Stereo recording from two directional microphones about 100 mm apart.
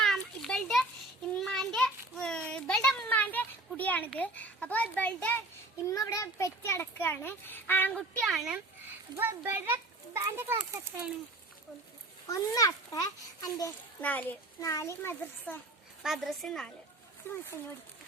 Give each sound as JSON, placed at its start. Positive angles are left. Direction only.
{"t": 0.0, "sound": "children playing", "side_deg": 5}
{"t": 1.4, "sound": "a sound", "side_deg": 5}
{"t": 4.2, "sound": "a child's voice", "side_deg": 15}
{"t": 5.8, "sound": "a child's voice", "side_deg": 35}
{"t": 8.2, "sound": "a woman's voice", "side_deg": 0}
{"t": 9.1, "sound": "a child's voice", "side_deg": -25}
{"t": 12.3, "sound": "a child's voice", "side_deg": 35}
{"t": 14.0, "sound": "a child's voice", "side_deg": 15}
{"t": 14.6, "sound": "a child's voice", "side_deg": 30}
{"t": 16.0, "sound": "a woman's voice", "side_deg": 0}